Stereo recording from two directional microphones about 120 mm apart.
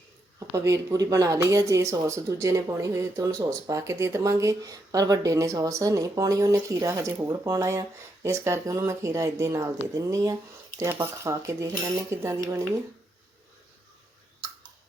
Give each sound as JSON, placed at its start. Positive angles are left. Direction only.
{"t": 0.3, "sound": "speech", "side_deg": -25}